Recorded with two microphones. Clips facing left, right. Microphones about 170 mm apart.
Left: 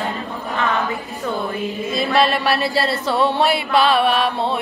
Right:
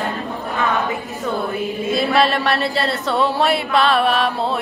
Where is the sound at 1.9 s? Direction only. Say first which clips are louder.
Even; centre (ahead or behind).